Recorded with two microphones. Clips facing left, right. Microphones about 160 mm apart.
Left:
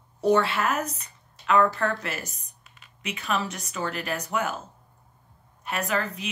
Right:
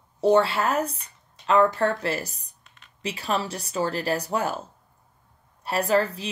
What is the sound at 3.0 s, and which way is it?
A woman's voice, 30° right (ahead or behind).